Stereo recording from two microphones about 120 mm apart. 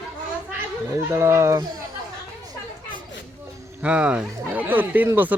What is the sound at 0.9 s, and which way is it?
Speech, 25° right (ahead or behind).